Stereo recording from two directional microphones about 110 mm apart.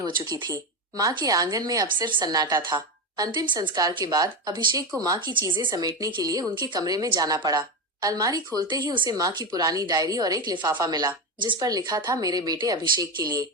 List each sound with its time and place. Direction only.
0.0 s a woman's voice: 40° right (ahead or behind)
5.7 s a woman's voice: 35° right (ahead or behind)